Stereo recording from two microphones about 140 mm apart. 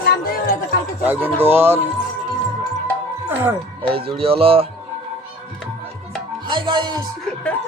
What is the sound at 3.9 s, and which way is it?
Speech, 40° right (ahead or behind).